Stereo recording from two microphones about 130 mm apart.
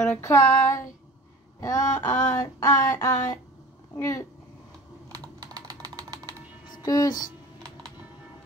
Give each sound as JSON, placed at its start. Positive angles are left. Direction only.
{"t": 0.2, "sound": "a sound", "side_deg": 20}
{"t": 5.1, "sound": "typing", "side_deg": -30}
{"t": 6.7, "sound": "a woman's voice", "side_deg": 30}